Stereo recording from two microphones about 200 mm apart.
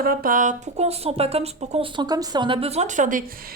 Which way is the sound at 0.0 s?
45° right (ahead or behind).